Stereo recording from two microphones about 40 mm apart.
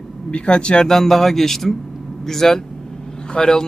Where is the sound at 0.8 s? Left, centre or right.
Centre.